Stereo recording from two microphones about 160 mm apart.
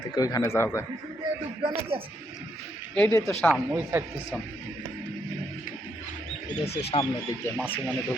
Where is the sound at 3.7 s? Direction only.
15° right (ahead or behind).